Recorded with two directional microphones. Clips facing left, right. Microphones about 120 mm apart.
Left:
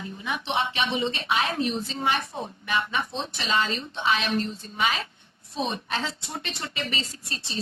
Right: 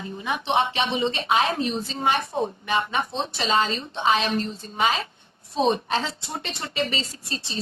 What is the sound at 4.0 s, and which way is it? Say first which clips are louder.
A woman's voice: right 3 dB; 35° right (ahead or behind).